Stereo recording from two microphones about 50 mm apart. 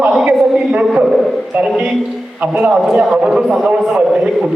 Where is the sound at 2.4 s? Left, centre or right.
Right.